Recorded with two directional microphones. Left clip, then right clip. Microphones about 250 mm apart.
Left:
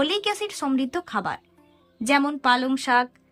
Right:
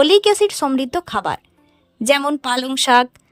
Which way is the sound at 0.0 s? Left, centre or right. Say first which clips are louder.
Right 12 dB; right.